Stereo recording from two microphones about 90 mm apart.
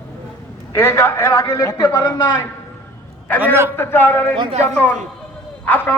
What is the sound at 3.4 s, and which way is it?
Speech, 25° right (ahead or behind).